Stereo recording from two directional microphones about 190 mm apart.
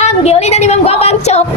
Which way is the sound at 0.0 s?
35° left (ahead or behind).